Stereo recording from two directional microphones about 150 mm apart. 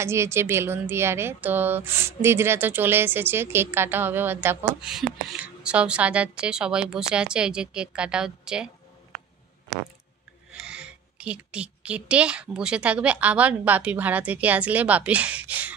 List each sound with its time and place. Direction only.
0.0 s a woman's voice: 20° right (ahead or behind)
10.6 s a woman's voice: 5° right (ahead or behind)